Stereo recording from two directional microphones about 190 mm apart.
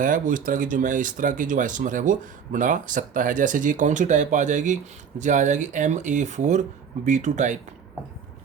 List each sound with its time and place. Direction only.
0.0 s speech: 45° right (ahead or behind)